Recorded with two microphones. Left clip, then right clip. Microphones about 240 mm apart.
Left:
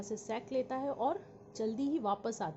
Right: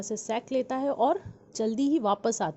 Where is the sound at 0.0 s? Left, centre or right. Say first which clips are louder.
Right 8 dB; right.